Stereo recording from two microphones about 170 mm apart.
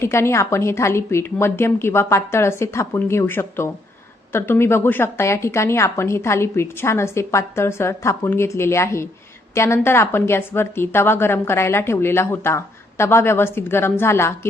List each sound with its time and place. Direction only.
0.0 s a woman's voice: 15° left (ahead or behind)